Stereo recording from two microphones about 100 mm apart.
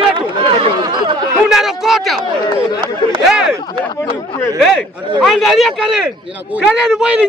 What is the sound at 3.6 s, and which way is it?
Speech, 45° left (ahead or behind).